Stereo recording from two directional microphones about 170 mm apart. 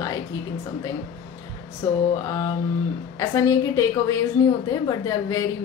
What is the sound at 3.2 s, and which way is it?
Speech, 20° left (ahead or behind).